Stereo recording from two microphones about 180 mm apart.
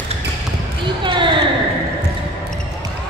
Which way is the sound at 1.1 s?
25° right (ahead or behind).